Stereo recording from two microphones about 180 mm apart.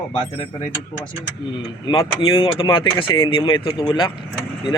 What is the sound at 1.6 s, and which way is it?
Speech, 25° left (ahead or behind).